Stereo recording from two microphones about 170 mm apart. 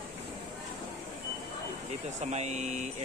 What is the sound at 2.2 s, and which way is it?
Speech, 40° right (ahead or behind).